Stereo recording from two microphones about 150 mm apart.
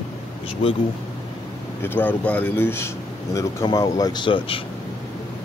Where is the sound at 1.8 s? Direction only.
15° left (ahead or behind); by 4.6 s 35° left (ahead or behind).